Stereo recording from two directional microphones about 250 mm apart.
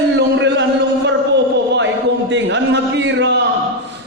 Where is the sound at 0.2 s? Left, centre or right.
Right.